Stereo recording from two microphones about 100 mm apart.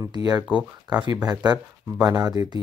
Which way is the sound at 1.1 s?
40° right (ahead or behind).